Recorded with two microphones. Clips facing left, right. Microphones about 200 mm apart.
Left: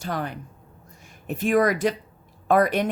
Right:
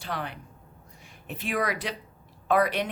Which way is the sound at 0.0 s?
45° left (ahead or behind).